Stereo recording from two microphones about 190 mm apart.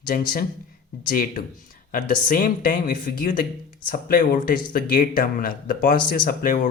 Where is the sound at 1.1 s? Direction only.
50° left (ahead or behind).